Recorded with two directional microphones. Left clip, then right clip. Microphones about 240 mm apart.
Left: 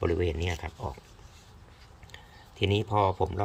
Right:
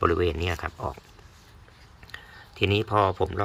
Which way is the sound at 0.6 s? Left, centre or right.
Right.